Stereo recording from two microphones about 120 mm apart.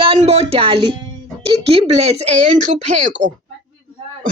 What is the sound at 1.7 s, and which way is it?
Speech, 60° right (ahead or behind).